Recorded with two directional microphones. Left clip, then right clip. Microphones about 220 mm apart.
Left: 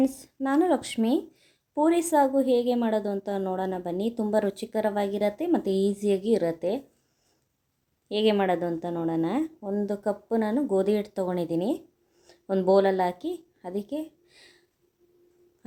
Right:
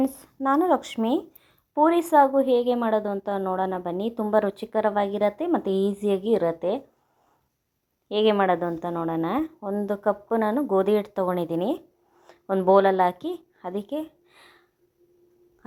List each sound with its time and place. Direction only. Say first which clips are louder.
0.0 s speech: right 2 dB; centre (ahead or behind)
8.1 s a woman's voice: right 3 dB; centre (ahead or behind)